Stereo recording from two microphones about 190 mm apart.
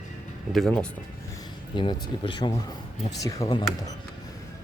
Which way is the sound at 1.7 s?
25° left (ahead or behind).